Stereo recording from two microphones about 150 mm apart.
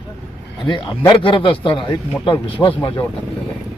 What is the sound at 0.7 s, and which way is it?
Speech, 30° left (ahead or behind).